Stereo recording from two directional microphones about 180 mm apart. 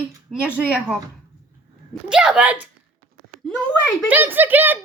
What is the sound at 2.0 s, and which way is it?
Speech, 5° right (ahead or behind).